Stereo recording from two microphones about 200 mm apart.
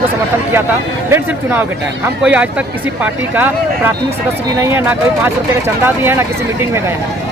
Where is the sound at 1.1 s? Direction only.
10° right (ahead or behind).